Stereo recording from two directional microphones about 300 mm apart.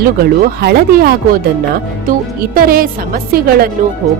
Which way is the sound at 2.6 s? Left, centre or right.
Right.